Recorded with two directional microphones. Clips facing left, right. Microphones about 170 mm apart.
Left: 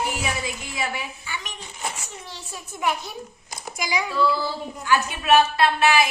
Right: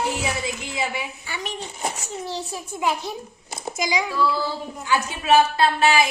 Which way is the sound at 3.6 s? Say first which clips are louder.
Right 3 dB; 20° right (ahead or behind).